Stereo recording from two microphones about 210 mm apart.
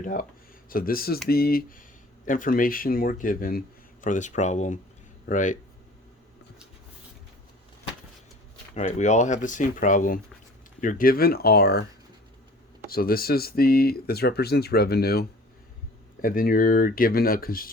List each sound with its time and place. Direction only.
0.0 s speech: 40° left (ahead or behind)
8.7 s speech: 35° left (ahead or behind); by 11.9 s 50° left (ahead or behind)
12.9 s speech: 45° left (ahead or behind)